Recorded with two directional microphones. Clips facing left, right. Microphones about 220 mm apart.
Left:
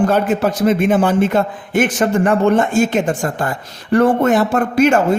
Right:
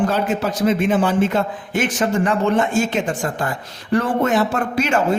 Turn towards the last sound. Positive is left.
turn(degrees=50)  # may be behind; listen again after turning